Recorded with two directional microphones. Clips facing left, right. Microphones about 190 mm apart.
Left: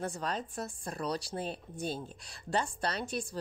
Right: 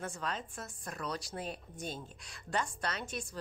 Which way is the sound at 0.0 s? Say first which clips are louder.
Left 4 dB; 35° left (ahead or behind).